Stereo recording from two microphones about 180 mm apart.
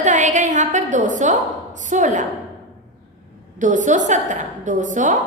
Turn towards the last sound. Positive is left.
turn(degrees=-45)  # may be behind; listen again after turning